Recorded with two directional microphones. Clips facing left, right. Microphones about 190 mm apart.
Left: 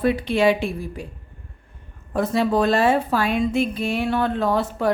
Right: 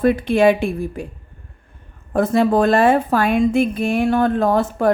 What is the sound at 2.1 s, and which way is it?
Speech, 50° right (ahead or behind).